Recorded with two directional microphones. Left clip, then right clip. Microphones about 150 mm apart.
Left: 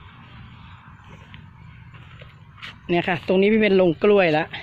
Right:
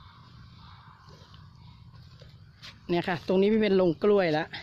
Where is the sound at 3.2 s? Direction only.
15° right (ahead or behind).